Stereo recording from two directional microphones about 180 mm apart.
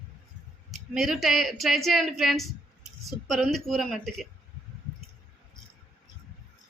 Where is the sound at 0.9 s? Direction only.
Centre (ahead or behind).